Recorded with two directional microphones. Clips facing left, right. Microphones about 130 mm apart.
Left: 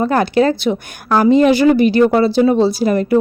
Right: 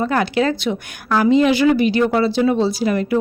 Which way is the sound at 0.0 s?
40° left (ahead or behind).